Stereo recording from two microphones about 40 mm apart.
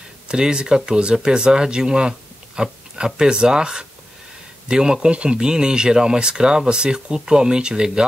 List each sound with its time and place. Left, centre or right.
0.3 s speech: right